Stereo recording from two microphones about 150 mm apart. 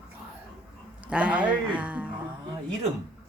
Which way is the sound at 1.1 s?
10° right (ahead or behind).